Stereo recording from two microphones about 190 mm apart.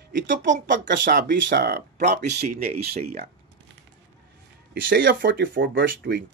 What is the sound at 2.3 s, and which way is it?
Speech, 40° right (ahead or behind).